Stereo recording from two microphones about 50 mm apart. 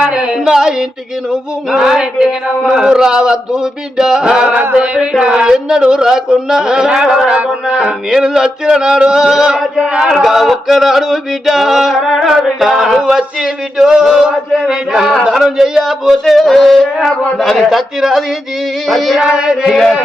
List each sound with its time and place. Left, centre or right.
0.0 s a sound: centre
0.4 s speech: centre
4.7 s a sound: centre
5.2 s speech: centre
9.6 s male singing: centre
13.0 s speech: centre
15.2 s male singing: centre
19.2 s speech: centre